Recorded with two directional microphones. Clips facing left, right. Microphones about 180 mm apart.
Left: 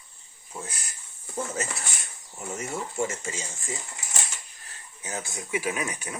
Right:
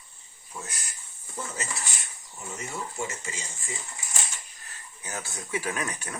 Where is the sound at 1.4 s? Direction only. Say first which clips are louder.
Left 5 dB; 50° left (ahead or behind).